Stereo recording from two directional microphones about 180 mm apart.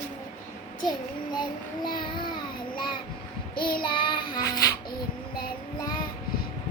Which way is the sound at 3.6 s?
55° left (ahead or behind).